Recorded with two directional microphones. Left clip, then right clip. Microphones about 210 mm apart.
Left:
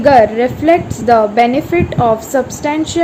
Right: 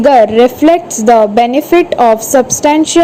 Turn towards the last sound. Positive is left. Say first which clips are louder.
# right 8 dB
turn(degrees=-30)  # may be behind; listen again after turning